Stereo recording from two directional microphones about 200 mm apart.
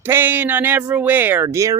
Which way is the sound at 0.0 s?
10° right (ahead or behind).